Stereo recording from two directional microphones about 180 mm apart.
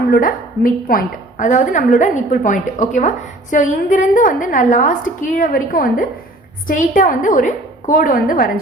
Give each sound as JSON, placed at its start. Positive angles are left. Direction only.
{"t": 0.1, "sound": "a woman's voice", "side_deg": 50}